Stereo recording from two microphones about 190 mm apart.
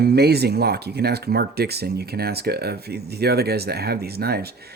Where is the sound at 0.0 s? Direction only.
60° right (ahead or behind).